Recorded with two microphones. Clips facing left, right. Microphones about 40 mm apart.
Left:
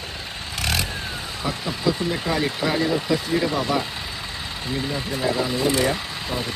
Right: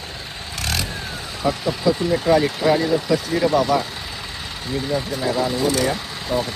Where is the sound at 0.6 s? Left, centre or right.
Left.